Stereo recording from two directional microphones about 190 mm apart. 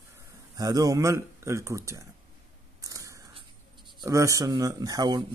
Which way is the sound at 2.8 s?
15° right (ahead or behind).